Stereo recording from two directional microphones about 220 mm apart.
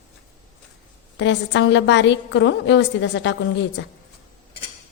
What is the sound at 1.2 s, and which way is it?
A woman's voice, 55° left (ahead or behind).